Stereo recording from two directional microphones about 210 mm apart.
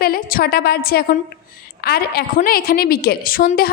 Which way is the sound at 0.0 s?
45° left (ahead or behind).